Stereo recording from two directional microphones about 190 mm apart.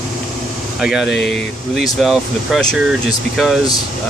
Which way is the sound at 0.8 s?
Centre (ahead or behind).